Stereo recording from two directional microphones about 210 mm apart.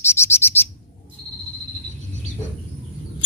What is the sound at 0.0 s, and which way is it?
Bird, 10° left (ahead or behind).